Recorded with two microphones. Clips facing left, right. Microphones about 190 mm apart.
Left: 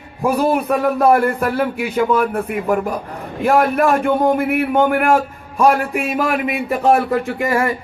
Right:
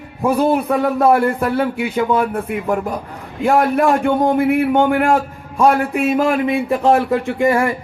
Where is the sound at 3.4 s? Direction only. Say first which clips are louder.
Even; 25° right (ahead or behind).